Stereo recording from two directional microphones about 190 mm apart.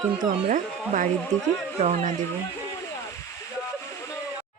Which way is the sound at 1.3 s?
40° right (ahead or behind).